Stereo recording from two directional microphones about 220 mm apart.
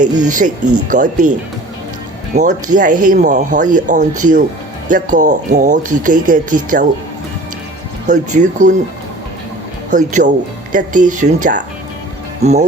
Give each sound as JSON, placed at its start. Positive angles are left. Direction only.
{"t": 0.2, "sound": "speech", "side_deg": -35}
{"t": 2.3, "sound": "speech", "side_deg": -35}
{"t": 8.0, "sound": "speech", "side_deg": -35}
{"t": 9.9, "sound": "speech", "side_deg": -35}
{"t": 12.4, "sound": "speech", "side_deg": -30}